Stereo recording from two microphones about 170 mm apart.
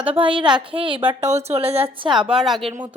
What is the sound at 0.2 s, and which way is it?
A woman's voice, 30° right (ahead or behind).